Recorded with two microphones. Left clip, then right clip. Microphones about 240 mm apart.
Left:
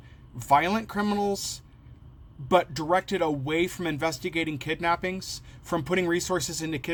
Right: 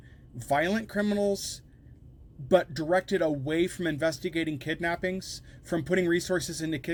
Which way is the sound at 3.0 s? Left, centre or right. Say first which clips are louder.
Even; centre.